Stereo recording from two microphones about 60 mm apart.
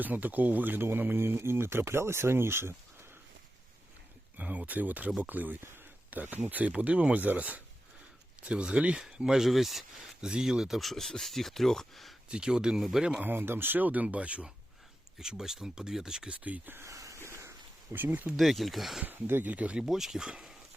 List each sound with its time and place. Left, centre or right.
0.0 s speech: right
4.4 s speech: right
9.0 s speech: centre
10.2 s speech: centre
12.3 s speech: centre
13.1 s speech: right
15.2 s speech: centre
16.4 s speech: right
16.9 s a sound: right
17.2 s a sound: right
17.9 s speech: right
18.3 s speech: centre
19.0 s speech: right
19.8 s speech: centre